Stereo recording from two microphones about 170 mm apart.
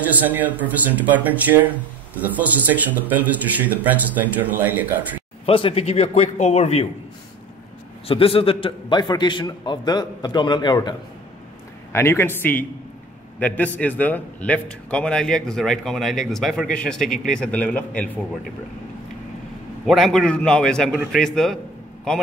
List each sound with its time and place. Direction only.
0.1 s speech: 10° right (ahead or behind)
5.4 s a man's voice: 35° left (ahead or behind)
8.1 s a man's voice: 35° left (ahead or behind)
11.9 s a man's voice: 15° left (ahead or behind)
19.9 s a man's voice: 5° left (ahead or behind)